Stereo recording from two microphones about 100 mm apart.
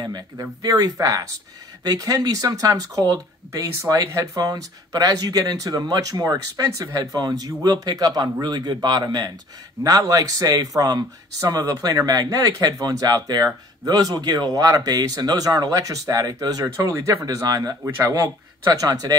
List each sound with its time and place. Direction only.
0.0 s speech: 40° right (ahead or behind)